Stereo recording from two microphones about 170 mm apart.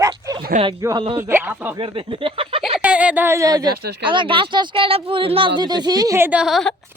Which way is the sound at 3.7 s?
70° right (ahead or behind).